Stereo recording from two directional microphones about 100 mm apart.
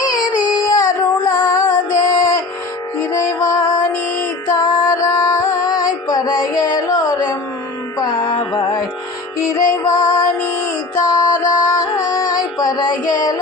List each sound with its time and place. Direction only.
0.0 s music: 40° left (ahead or behind)
7.9 s music: 45° left (ahead or behind)
9.5 s music: 30° left (ahead or behind)